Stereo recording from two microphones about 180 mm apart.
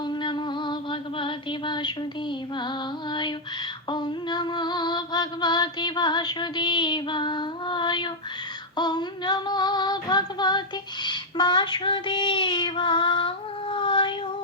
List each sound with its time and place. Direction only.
0.0 s music: 25° left (ahead or behind)
2.6 s a sound: 25° left (ahead or behind)
11.0 s child singing: 25° left (ahead or behind)